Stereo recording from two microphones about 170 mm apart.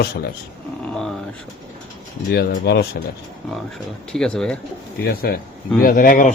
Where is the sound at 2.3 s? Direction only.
70° left (ahead or behind).